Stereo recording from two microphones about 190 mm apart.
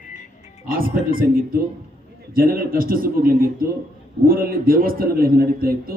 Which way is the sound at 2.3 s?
50° right (ahead or behind).